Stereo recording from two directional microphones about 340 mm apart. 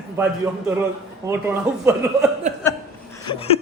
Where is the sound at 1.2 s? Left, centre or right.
Centre.